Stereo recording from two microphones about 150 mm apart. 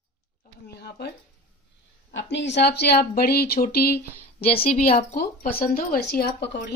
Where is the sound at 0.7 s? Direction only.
90° left.